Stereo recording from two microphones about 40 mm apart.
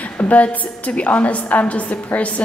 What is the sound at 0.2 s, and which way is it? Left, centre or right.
A woman's voice, left.